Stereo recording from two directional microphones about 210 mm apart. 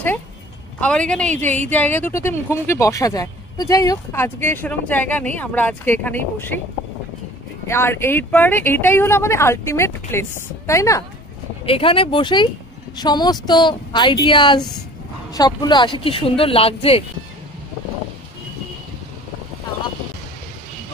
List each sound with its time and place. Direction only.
0.7 s a woman's voice: 5° left (ahead or behind)
7.6 s a woman's voice: 10° left (ahead or behind)
11.6 s speech: 25° left (ahead or behind)